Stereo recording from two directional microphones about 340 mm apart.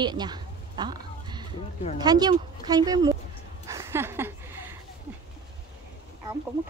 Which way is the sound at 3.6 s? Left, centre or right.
Centre.